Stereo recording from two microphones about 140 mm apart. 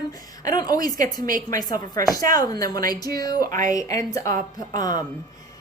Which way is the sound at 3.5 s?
70° right (ahead or behind).